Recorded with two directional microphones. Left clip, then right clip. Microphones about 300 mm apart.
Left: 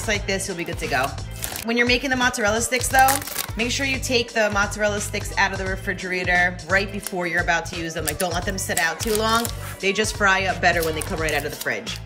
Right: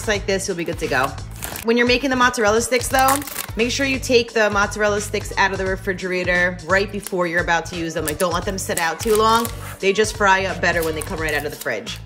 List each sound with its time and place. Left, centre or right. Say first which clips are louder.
0.0 s speech: right 3 dB; centre